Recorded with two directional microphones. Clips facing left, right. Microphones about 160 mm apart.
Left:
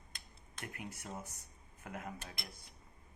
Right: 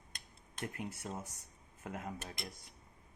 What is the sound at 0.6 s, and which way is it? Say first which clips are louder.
Cutlery: right 5 dB; 30° right (ahead or behind).